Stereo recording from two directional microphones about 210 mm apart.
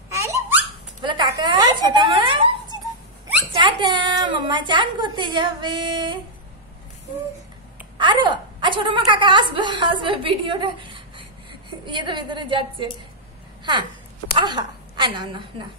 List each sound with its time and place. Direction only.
0.1 s baby laughter: 15° right (ahead or behind)
1.0 s a woman's voice: 20° right (ahead or behind)
8.0 s a woman's voice: 20° right (ahead or behind)
14.4 s a woman's voice: 20° right (ahead or behind)